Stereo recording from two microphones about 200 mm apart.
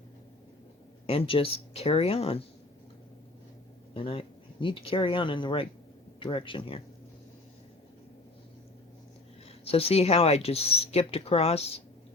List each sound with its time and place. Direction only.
1.0 s speech: 30° left (ahead or behind)
3.9 s speech: 25° left (ahead or behind)
9.6 s speech: 30° left (ahead or behind)